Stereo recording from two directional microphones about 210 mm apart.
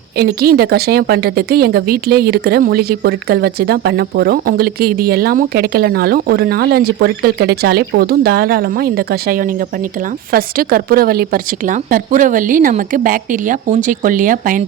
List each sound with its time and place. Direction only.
0.2 s a woman's voice: 50° right (ahead or behind)